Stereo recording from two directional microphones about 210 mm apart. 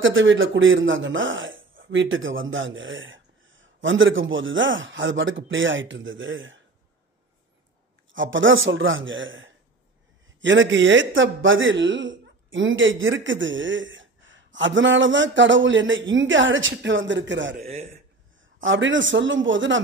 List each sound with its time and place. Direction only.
0.0 s speech: 65° right (ahead or behind)
8.1 s speech: 65° right (ahead or behind)
18.6 s speech: 65° right (ahead or behind)